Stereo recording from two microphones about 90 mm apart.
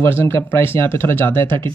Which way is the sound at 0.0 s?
25° left (ahead or behind).